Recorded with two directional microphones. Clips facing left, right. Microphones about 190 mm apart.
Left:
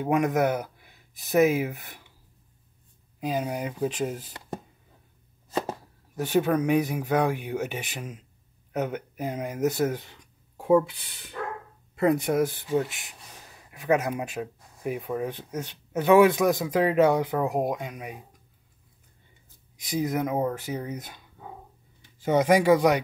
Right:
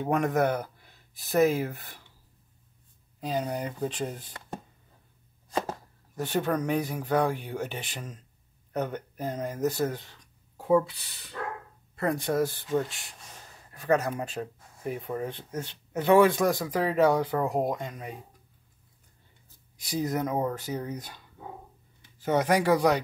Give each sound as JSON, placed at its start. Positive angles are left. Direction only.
{"t": 0.0, "sound": "speech", "side_deg": 5}
{"t": 3.2, "sound": "speech", "side_deg": 10}
{"t": 6.1, "sound": "speech", "side_deg": 10}
{"t": 20.1, "sound": "speech", "side_deg": 5}
{"t": 22.2, "sound": "speech", "side_deg": 15}